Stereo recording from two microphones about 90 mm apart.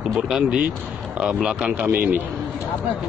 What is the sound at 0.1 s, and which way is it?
A man's voice, 5° right (ahead or behind).